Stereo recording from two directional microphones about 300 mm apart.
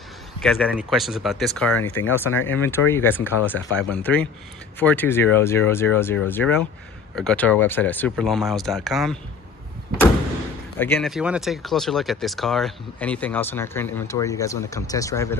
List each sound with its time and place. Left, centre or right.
0.4 s speech: centre
10.8 s speech: centre